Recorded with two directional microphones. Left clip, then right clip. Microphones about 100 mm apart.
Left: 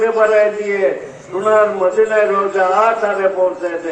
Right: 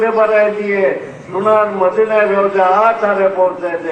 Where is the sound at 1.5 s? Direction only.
35° left (ahead or behind).